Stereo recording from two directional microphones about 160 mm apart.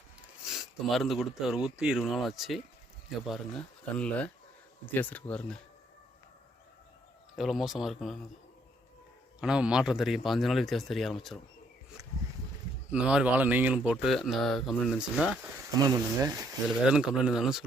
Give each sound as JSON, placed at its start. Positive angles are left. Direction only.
{"t": 0.5, "sound": "speech", "side_deg": 0}
{"t": 7.3, "sound": "speech", "side_deg": 0}
{"t": 9.4, "sound": "speech", "side_deg": -5}
{"t": 12.9, "sound": "speech", "side_deg": -5}
{"t": 15.8, "sound": "speech", "side_deg": -25}
{"t": 16.8, "sound": "speech", "side_deg": -5}